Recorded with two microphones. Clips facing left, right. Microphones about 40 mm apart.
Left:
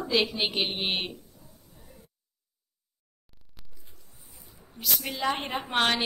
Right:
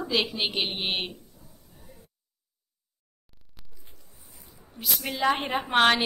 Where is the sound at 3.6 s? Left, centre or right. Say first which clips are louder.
Even; centre.